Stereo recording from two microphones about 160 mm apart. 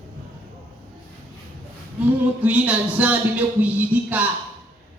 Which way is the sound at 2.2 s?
10° right (ahead or behind).